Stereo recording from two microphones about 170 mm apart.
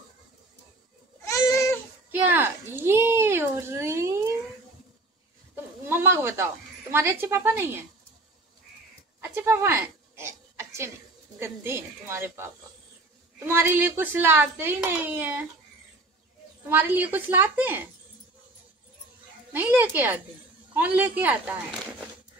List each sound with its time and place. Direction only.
1.3 s goat: 20° left (ahead or behind)
2.1 s a sound: 10° right (ahead or behind)
5.9 s a sound: 15° right (ahead or behind)
6.9 s speech: 15° right (ahead or behind)
9.2 s a sound: 15° right (ahead or behind)
11.3 s speech: 15° right (ahead or behind)
13.5 s speech: 15° right (ahead or behind)
16.6 s speech: 10° right (ahead or behind)
19.5 s speech: 10° right (ahead or behind)